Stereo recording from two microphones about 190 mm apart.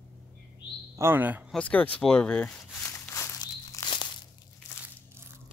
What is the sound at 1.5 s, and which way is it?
Walk, 5° left (ahead or behind).